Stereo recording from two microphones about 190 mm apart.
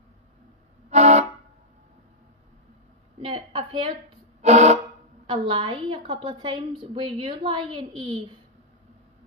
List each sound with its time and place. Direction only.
0.8 s vehicle horn: 35° right (ahead or behind)
3.2 s a woman's voice: 25° right (ahead or behind)
4.4 s a sound: 35° right (ahead or behind)
5.2 s a woman's voice: 25° right (ahead or behind)